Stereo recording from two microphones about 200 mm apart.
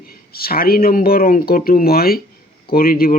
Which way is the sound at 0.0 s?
50° left (ahead or behind).